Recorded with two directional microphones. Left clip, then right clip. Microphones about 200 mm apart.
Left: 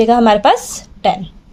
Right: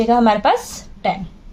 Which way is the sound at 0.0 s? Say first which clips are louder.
Left 4 dB; 40° left (ahead or behind).